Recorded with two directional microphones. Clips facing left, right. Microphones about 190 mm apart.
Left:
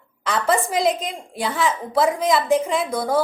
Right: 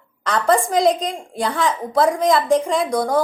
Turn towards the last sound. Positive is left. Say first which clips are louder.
# right 2 dB
turn(degrees=5)  # may be behind; listen again after turning